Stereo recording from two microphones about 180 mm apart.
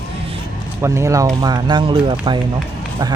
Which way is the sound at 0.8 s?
15° right (ahead or behind).